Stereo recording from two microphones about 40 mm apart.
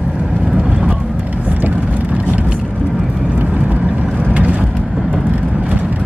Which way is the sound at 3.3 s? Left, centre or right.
Right.